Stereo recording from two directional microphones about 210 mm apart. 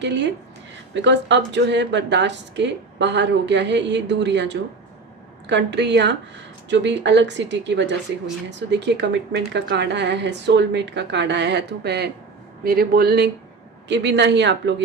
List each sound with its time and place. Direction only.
0.0 s speech: 55° right (ahead or behind)